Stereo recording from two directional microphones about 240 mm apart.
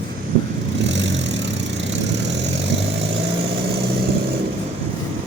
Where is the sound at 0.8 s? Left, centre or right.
Right.